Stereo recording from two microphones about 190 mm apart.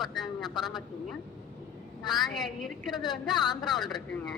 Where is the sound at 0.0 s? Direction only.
Centre (ahead or behind).